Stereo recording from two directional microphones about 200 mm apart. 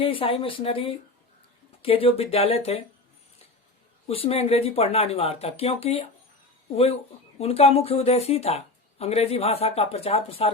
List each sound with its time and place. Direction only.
0.0 s speech: 25° left (ahead or behind)
4.0 s speech: 30° left (ahead or behind)
7.3 s speech: 30° left (ahead or behind)